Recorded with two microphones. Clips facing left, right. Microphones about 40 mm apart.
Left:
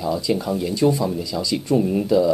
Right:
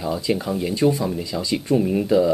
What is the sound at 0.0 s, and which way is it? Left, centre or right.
A woman's voice, centre.